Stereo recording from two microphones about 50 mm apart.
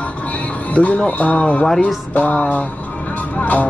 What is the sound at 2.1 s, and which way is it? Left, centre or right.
Music, left.